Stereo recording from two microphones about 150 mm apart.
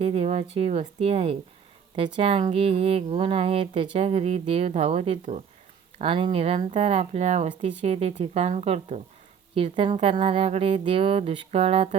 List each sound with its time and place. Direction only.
0.0 s a woman's voice: 45° right (ahead or behind)